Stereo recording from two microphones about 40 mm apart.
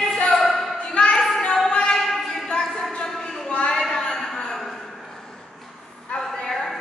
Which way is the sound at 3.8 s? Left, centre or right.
Centre.